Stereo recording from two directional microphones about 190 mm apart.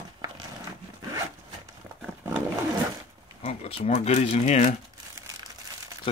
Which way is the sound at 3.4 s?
35° left (ahead or behind).